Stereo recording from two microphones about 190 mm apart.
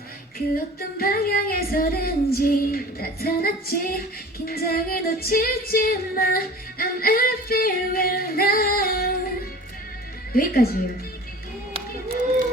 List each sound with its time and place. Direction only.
0.3 s female singing: 50° left (ahead or behind)
10.3 s female singing: 50° left (ahead or behind)